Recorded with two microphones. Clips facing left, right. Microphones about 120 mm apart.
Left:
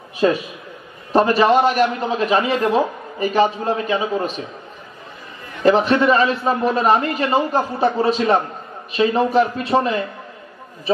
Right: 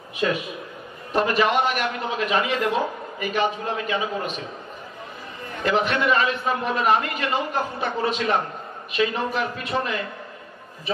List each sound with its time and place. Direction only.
0.2 s a man's voice: 35° left (ahead or behind)
5.6 s a man's voice: 35° left (ahead or behind)